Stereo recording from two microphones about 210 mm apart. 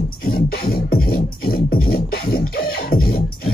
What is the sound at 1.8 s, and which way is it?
Music, 45° left (ahead or behind).